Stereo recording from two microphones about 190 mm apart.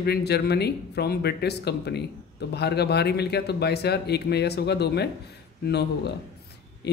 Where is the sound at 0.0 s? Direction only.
60° left (ahead or behind).